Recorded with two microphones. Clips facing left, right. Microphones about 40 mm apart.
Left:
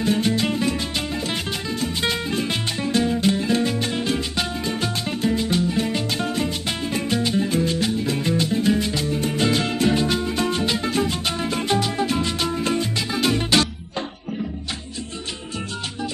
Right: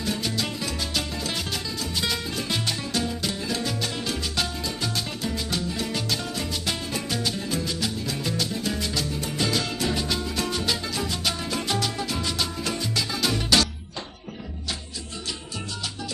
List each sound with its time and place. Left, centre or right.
0.0 s music: left